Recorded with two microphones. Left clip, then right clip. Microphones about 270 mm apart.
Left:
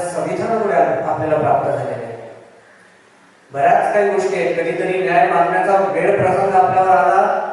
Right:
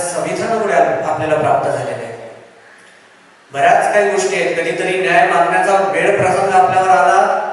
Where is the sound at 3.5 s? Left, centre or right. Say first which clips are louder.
Right 2 dB; centre.